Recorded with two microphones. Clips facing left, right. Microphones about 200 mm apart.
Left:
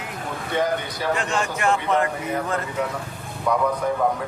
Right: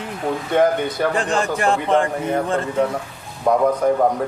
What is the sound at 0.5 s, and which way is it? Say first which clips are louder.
Speech: right 6 dB; 55° right (ahead or behind).